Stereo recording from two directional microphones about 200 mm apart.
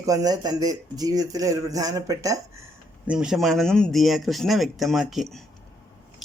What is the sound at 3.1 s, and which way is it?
Speech, 5° right (ahead or behind).